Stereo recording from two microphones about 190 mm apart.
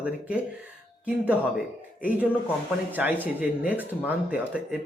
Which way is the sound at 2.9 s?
10° right (ahead or behind).